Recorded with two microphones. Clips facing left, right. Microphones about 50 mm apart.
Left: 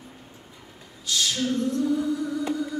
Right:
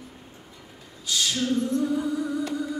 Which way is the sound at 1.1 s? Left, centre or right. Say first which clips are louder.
Even; centre.